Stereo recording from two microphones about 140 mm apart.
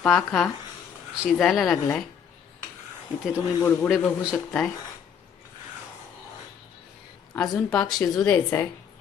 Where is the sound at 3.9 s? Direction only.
5° left (ahead or behind).